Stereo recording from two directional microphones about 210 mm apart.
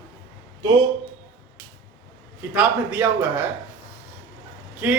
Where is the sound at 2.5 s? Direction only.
5° right (ahead or behind).